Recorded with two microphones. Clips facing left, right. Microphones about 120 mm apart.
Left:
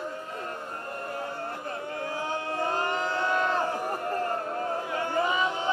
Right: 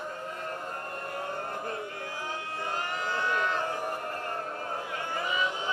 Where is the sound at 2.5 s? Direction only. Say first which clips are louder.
Left 7 dB; 35° left (ahead or behind).